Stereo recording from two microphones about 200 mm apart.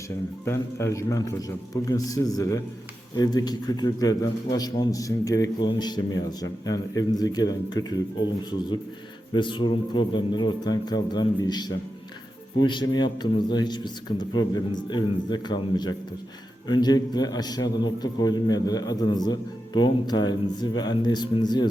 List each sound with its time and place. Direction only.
0.4 s a man's voice: 15° left (ahead or behind)